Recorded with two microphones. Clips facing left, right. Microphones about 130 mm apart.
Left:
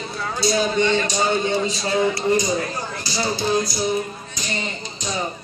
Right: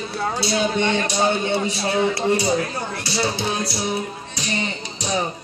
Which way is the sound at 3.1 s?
65° right (ahead or behind).